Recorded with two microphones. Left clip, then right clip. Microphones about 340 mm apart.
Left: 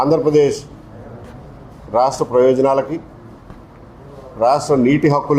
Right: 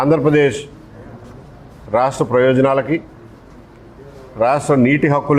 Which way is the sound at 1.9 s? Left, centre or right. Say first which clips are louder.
Even; right.